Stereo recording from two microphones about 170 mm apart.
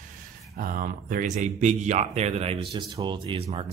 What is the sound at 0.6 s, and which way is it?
Speech, 55° right (ahead or behind).